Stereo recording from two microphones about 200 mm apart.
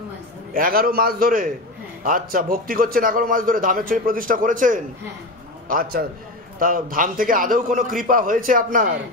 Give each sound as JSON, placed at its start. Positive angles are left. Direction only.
{"t": 0.5, "sound": "a man's voice", "side_deg": -45}